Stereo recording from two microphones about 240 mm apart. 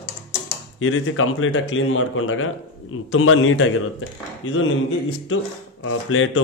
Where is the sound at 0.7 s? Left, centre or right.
Left.